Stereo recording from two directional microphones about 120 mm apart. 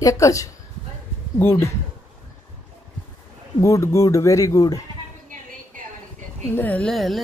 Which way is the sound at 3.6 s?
25° left (ahead or behind).